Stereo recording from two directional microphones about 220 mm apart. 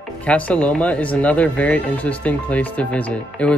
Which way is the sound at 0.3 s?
5° left (ahead or behind).